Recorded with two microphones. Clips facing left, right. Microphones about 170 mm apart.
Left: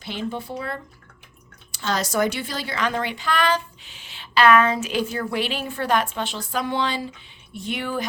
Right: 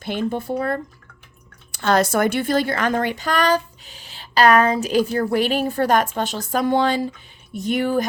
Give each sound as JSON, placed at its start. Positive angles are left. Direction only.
{"t": 0.0, "sound": "a woman's voice", "side_deg": -50}